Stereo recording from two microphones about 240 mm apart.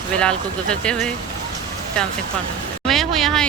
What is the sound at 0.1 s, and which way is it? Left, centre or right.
Speech, centre.